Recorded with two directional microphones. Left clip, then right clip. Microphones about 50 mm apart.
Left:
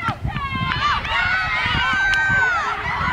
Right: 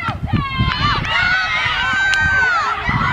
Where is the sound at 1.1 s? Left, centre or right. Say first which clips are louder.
Right 4 dB; right.